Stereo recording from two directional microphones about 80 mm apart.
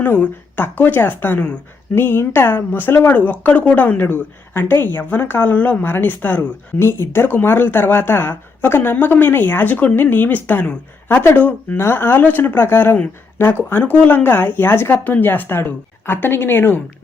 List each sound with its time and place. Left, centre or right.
0.0 s speech: left
11.8 s speech: left